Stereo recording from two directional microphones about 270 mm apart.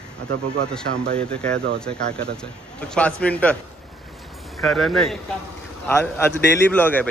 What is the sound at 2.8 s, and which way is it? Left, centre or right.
Speech, centre.